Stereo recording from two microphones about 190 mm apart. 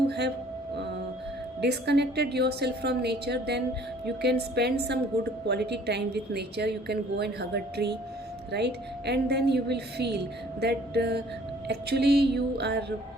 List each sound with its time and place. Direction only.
1.6 s a woman's voice: 60° right (ahead or behind)